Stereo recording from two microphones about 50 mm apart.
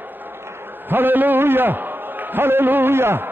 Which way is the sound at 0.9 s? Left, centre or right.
Right.